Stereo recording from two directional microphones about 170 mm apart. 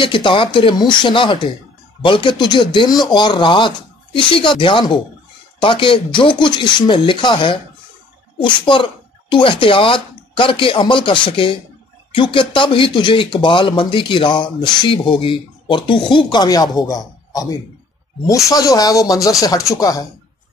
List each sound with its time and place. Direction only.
0.0 s speech: 30° left (ahead or behind)